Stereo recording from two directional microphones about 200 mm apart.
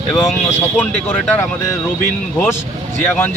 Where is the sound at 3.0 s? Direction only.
10° left (ahead or behind).